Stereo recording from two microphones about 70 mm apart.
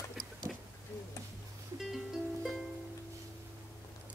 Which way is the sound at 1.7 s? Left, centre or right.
Centre.